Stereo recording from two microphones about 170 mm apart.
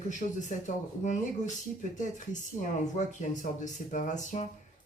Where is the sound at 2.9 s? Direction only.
45° left (ahead or behind).